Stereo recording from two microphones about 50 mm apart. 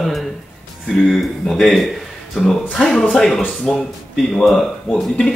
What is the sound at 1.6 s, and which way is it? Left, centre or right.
Speech, centre.